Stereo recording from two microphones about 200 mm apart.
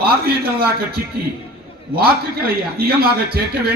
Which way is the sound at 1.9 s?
50° right (ahead or behind).